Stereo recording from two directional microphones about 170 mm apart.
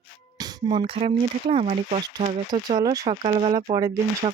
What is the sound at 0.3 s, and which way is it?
Speech, 25° right (ahead or behind).